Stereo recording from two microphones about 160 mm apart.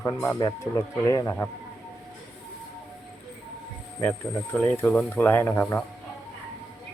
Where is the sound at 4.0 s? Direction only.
5° left (ahead or behind).